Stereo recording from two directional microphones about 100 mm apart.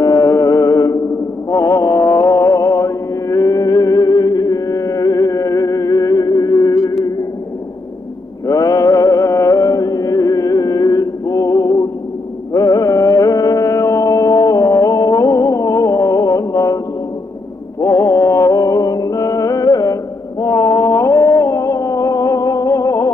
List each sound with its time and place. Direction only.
0.0 s music: 35° left (ahead or behind)
8.5 s music: 35° left (ahead or behind)